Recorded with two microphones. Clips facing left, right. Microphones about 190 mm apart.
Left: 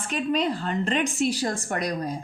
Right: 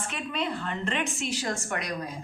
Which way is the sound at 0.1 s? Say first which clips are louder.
Left 9 dB; 40° left (ahead or behind).